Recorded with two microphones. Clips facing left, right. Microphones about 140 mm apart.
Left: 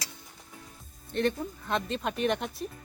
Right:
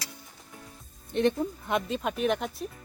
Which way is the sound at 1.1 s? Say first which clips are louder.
Right 3 dB; 20° right (ahead or behind).